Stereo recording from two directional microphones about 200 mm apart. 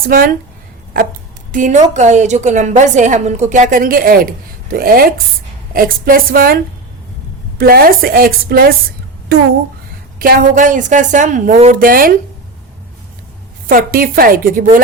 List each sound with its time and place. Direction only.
0.1 s a woman's voice: 45° right (ahead or behind)
1.5 s a woman's voice: 40° right (ahead or behind)
7.6 s a woman's voice: 50° right (ahead or behind)
10.2 s a woman's voice: 45° right (ahead or behind)
13.7 s a woman's voice: 45° right (ahead or behind)